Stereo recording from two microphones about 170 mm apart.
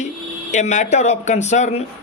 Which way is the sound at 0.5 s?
45° left (ahead or behind).